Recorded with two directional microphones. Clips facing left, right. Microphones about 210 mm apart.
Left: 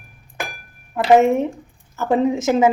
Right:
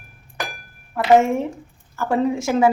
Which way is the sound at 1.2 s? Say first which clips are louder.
Left 4 dB; 20° left (ahead or behind).